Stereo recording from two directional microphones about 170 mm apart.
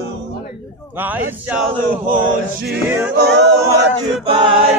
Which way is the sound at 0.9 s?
10° right (ahead or behind).